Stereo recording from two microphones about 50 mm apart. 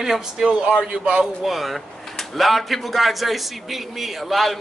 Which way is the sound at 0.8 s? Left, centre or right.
Right.